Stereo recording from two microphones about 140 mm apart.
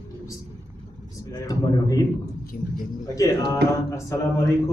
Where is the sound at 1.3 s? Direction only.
25° left (ahead or behind).